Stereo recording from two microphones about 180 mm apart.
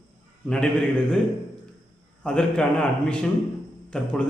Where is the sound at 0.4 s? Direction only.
5° left (ahead or behind).